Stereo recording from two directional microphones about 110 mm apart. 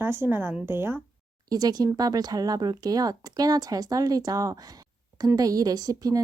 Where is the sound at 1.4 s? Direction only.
35° right (ahead or behind).